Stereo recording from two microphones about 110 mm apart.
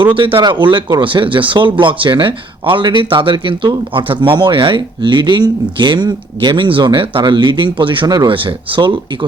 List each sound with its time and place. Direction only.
0.3 s speech: 45° right (ahead or behind)